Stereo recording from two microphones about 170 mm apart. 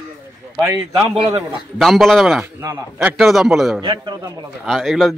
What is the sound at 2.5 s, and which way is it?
Speech, 15° right (ahead or behind).